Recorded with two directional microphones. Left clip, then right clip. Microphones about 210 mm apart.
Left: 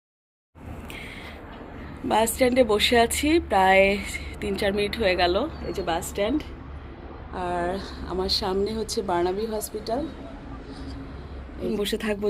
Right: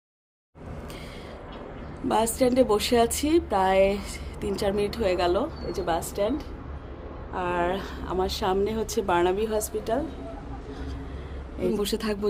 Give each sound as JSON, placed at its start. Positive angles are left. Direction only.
{"t": 2.0, "sound": "a woman's voice", "side_deg": -10}
{"t": 7.3, "sound": "speech", "side_deg": -5}
{"t": 8.7, "sound": "a woman's voice", "side_deg": -25}
{"t": 11.6, "sound": "a woman's voice", "side_deg": -20}